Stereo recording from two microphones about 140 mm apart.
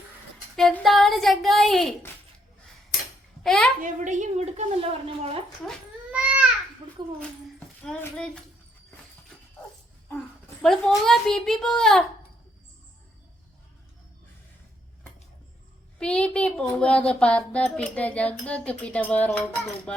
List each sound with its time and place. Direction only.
0.5 s a child's voice: 5° left (ahead or behind)
3.4 s a woman's voice: 5° left (ahead or behind)
3.8 s speech: 65° right (ahead or behind); by 5.4 s 45° right (ahead or behind)
6.1 s babbling: 10° right (ahead or behind)
7.9 s a child's voice: 10° left (ahead or behind)
10.6 s a child's voice: 5° left (ahead or behind)
16.0 s a child's voice: 5° left (ahead or behind)